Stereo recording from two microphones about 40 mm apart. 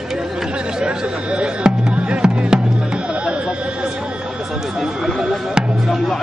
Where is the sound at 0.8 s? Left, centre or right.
Right.